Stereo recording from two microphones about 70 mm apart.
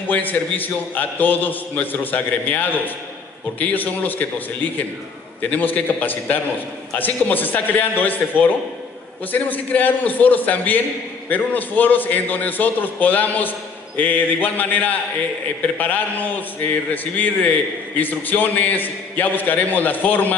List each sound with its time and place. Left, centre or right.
0.1 s a man's voice: left